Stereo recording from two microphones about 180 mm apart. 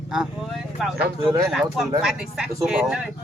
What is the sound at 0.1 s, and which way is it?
Speech, 5° right (ahead or behind).